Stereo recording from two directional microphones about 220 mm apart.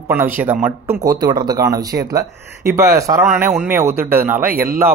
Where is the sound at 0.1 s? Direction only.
10° right (ahead or behind).